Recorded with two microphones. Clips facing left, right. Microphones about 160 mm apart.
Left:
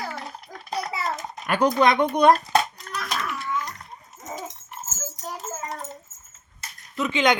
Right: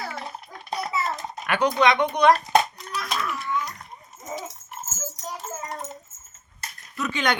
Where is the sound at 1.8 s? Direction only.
45° left (ahead or behind).